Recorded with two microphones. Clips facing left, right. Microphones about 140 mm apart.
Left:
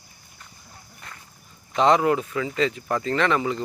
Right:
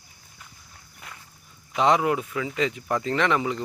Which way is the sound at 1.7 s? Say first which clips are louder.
Left 2 dB; 10° right (ahead or behind).